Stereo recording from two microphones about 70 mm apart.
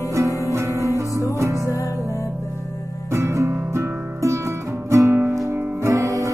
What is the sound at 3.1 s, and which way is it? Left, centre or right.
Music, right.